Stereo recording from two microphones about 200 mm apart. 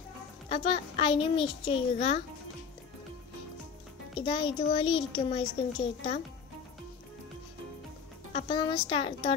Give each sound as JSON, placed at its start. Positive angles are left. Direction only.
{"t": 0.5, "sound": "speech", "side_deg": 25}
{"t": 4.2, "sound": "speech", "side_deg": 25}
{"t": 8.3, "sound": "speech", "side_deg": 30}